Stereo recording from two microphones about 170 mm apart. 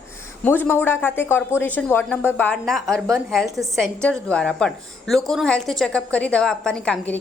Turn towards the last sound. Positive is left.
turn(degrees=5)  # may be behind; listen again after turning